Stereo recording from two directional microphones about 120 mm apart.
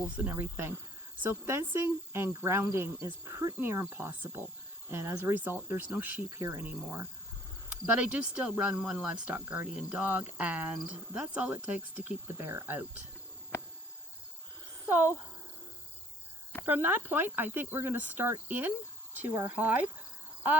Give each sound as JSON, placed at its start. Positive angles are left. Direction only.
{"t": 0.2, "sound": "speech", "side_deg": -15}
{"t": 1.2, "sound": "cricket", "side_deg": -15}
{"t": 4.9, "sound": "speech", "side_deg": -20}
{"t": 12.3, "sound": "speech", "side_deg": -25}
{"t": 14.8, "sound": "speech", "side_deg": -15}
{"t": 16.6, "sound": "speech", "side_deg": -15}